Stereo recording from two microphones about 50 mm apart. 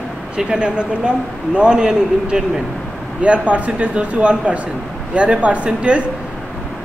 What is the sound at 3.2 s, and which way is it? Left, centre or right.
Speech, right.